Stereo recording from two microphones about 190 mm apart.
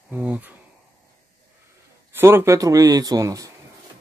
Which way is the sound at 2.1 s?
10° right (ahead or behind).